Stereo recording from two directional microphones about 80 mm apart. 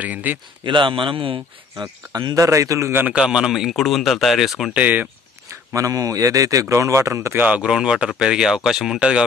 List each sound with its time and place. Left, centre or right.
0.0 s speech: right
0.7 s a man's voice: right
2.1 s a man's voice: right
3.1 s speech: centre
4.7 s speech: centre
5.5 s a man's voice: right
7.3 s speech: centre